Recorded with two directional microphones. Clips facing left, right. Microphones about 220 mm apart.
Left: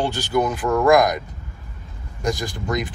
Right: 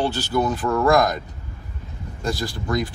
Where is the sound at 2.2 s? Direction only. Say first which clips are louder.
Left 2 dB; 15° left (ahead or behind).